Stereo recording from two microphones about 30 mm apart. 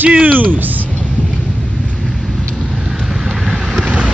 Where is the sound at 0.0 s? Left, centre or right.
Right.